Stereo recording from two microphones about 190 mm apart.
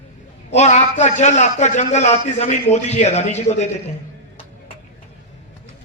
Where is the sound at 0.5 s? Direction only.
35° left (ahead or behind).